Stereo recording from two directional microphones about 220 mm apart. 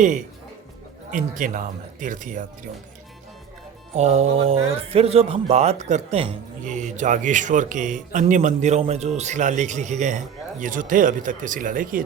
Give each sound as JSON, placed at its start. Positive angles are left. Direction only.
{"t": 1.1, "sound": "speech", "side_deg": -35}
{"t": 3.9, "sound": "speech", "side_deg": -30}